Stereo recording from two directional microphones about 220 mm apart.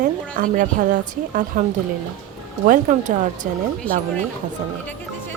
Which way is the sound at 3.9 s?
5° left (ahead or behind).